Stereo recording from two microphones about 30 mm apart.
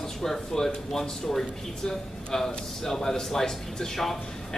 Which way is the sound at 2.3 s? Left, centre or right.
Centre.